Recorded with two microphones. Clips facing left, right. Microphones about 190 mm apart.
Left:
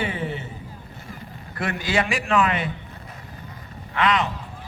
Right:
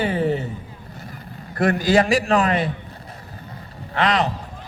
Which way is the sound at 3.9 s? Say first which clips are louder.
Right 2 dB; 35° right (ahead or behind).